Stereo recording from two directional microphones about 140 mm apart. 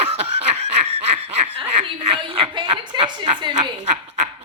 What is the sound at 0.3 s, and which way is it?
Snicker, 50° right (ahead or behind).